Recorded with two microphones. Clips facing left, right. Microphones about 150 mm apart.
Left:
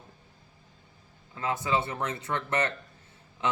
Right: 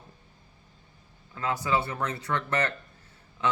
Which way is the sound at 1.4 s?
20° left (ahead or behind).